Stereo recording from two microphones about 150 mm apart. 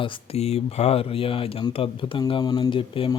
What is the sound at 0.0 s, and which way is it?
Speech, 40° left (ahead or behind).